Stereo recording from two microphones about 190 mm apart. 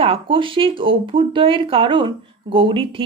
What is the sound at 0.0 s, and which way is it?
Speech, 30° right (ahead or behind).